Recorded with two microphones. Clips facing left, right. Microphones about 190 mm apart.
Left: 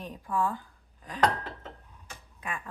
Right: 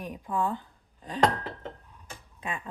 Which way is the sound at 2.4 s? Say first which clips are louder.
Right 2 dB; 25° right (ahead or behind).